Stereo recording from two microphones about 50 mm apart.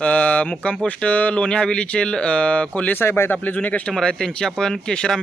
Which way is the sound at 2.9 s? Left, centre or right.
Left.